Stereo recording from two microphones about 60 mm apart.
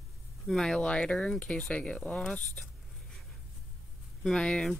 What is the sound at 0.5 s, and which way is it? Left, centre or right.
Speech, centre.